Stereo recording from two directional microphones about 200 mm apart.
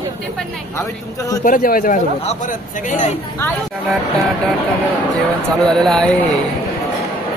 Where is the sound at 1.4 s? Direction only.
45° left (ahead or behind).